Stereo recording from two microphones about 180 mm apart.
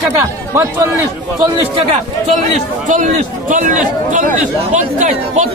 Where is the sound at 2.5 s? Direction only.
45° right (ahead or behind).